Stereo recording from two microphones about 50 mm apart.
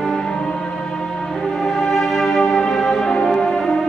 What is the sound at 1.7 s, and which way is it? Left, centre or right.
Music, centre.